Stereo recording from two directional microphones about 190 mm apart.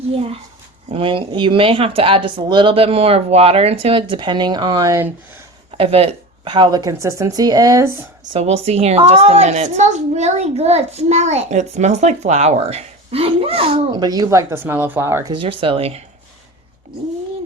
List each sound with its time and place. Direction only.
0.1 s speech: 30° right (ahead or behind); by 5.1 s 15° right (ahead or behind)
5.7 s speech: 30° right (ahead or behind)
8.4 s a child's voice: 35° right (ahead or behind); by 15.3 s 15° right (ahead or behind)
15.3 s speech: 25° right (ahead or behind)